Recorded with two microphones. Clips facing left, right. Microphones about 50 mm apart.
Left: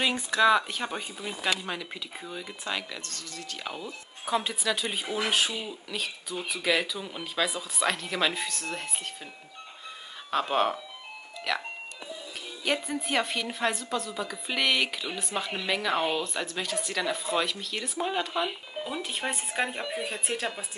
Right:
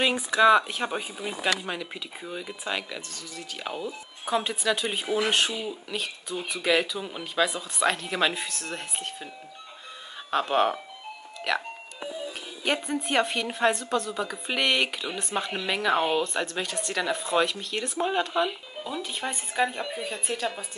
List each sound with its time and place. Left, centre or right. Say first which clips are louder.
0.0 s a woman's voice: right 3 dB; centre
10.3 s a woman's voice: right 2 dB; centre
12.6 s a woman's voice: right 2 dB; centre
18.9 s speech: right 1 dB; centre
19.9 s speech: even; left